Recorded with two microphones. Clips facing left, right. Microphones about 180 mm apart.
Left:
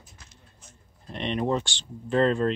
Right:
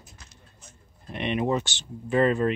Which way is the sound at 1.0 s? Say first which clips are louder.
Right 1 dB; 10° right (ahead or behind).